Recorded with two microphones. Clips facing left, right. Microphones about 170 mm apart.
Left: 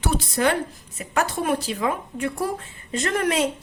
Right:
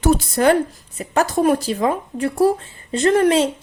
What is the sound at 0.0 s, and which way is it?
Speech, 40° right (ahead or behind).